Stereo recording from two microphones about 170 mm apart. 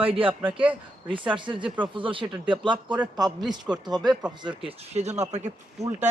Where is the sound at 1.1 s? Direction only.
30° right (ahead or behind).